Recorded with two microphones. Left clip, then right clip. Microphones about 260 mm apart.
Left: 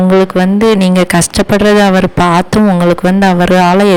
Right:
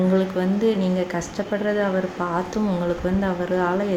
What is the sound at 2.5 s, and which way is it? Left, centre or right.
Speech, left.